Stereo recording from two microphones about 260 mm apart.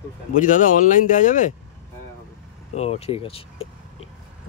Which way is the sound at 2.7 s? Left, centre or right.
Left.